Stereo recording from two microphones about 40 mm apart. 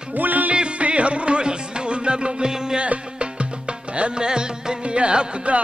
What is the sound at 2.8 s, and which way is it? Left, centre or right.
Music, right.